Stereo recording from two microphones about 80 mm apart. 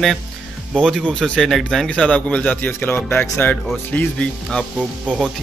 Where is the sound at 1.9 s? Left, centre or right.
Centre.